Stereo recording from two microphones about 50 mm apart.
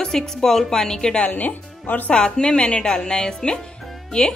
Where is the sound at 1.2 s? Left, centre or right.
Left.